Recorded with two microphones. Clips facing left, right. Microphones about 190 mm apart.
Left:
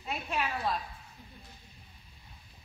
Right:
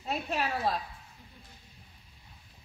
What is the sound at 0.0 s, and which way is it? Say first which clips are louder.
Speech: right 2 dB; 40° right (ahead or behind).